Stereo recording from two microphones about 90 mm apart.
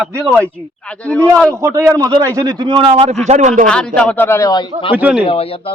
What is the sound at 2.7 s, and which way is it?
Speech, 90° right.